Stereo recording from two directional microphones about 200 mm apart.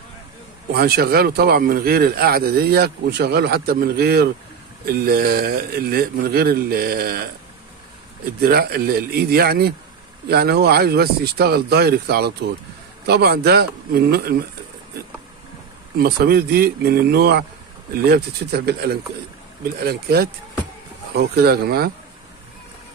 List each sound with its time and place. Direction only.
0.7 s speech: 50° right (ahead or behind)
8.4 s speech: 50° right (ahead or behind)
16.0 s speech: 50° right (ahead or behind)